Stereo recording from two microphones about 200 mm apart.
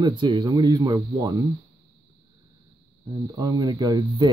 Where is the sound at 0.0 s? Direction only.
25° right (ahead or behind).